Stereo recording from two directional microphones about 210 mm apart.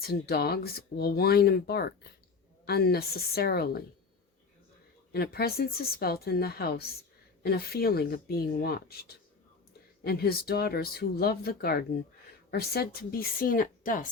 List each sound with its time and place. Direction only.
0.0 s speech: 45° left (ahead or behind)
5.1 s speech: 50° left (ahead or behind)